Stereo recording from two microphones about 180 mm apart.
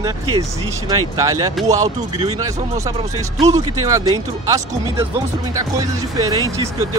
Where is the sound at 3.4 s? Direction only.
20° right (ahead or behind).